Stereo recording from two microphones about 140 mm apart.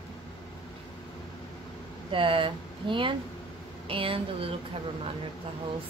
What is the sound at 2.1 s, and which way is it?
Speech, 40° right (ahead or behind).